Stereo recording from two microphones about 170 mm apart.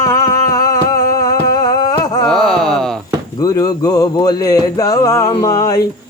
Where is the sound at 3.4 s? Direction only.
20° left (ahead or behind).